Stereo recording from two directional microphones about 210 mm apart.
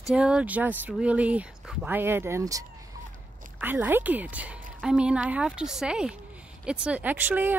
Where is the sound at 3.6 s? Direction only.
10° right (ahead or behind).